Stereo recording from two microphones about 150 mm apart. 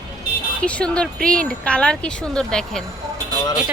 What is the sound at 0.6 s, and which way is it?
A woman's voice, 5° left (ahead or behind).